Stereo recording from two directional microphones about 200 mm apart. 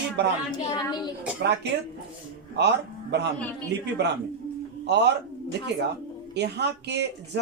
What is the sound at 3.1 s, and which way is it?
Speech, 60° right (ahead or behind).